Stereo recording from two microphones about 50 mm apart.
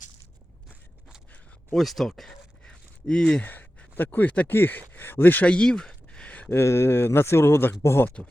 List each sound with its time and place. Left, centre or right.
1.7 s speech: centre
2.6 s a sound: centre
3.4 s speech: left
4.4 s speech: left
5.5 s a sound: centre
6.5 s speech: left
8.2 s speech: left